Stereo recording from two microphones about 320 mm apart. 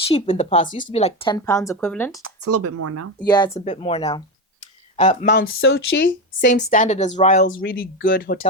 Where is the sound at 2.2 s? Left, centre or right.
Right.